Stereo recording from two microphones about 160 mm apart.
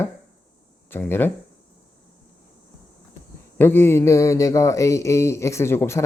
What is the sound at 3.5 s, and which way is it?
Speech, 15° left (ahead or behind).